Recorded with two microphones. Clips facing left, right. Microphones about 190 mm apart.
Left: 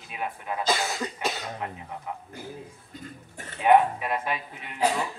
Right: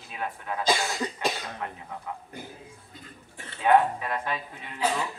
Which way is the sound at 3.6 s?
15° left (ahead or behind).